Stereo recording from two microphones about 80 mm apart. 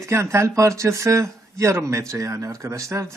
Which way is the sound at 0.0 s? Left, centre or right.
Right.